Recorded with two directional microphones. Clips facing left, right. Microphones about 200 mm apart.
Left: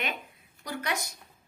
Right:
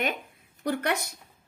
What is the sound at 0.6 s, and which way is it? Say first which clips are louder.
Speech: right 6 dB; 60° right (ahead or behind).